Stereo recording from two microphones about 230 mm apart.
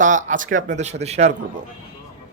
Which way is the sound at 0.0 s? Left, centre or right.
Right.